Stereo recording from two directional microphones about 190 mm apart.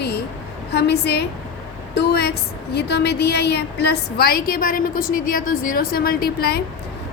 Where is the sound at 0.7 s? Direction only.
60° left (ahead or behind).